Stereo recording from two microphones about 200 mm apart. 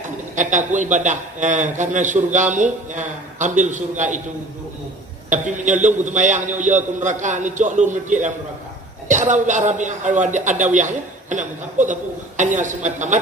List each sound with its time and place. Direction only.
0.3 s a man's voice: 40° right (ahead or behind)
5.3 s a man's voice: 40° right (ahead or behind)